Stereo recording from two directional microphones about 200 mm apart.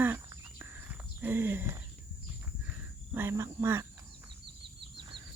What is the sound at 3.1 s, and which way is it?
Speech, 10° right (ahead or behind).